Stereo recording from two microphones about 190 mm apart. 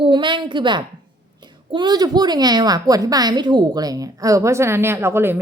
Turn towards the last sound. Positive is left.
turn(degrees=-10)  # may be behind; listen again after turning